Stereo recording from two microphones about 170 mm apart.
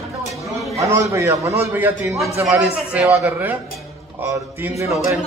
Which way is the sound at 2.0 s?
Centre (ahead or behind).